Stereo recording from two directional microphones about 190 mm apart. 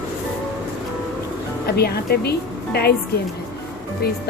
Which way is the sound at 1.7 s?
55° left (ahead or behind).